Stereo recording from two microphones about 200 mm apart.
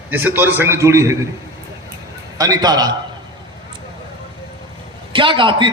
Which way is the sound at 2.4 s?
15° right (ahead or behind).